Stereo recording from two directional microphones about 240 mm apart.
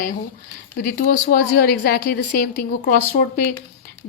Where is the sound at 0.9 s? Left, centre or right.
Left.